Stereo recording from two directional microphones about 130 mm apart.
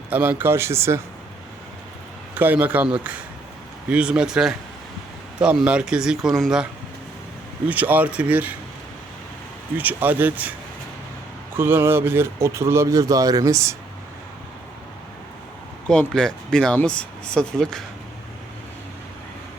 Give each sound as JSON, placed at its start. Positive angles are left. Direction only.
{"t": 0.1, "sound": "speech", "side_deg": -15}
{"t": 2.3, "sound": "a man's voice", "side_deg": -15}
{"t": 7.7, "sound": "a man's voice", "side_deg": -15}
{"t": 9.7, "sound": "a man's voice", "side_deg": -15}
{"t": 11.5, "sound": "speech", "side_deg": -15}
{"t": 15.9, "sound": "speech", "side_deg": 5}